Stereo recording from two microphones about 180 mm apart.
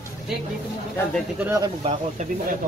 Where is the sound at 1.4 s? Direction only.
15° right (ahead or behind).